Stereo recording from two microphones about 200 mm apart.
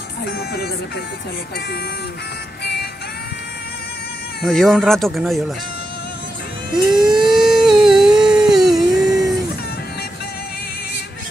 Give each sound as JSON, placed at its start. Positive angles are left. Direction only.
{"t": 0.2, "sound": "speech", "side_deg": 50}
{"t": 2.6, "sound": "music", "side_deg": 55}
{"t": 4.4, "sound": "speech", "side_deg": 0}
{"t": 6.7, "sound": "speech", "side_deg": -5}
{"t": 7.2, "sound": "a sound", "side_deg": -5}